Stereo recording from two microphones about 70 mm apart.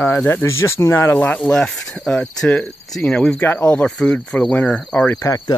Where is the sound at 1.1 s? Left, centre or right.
Left.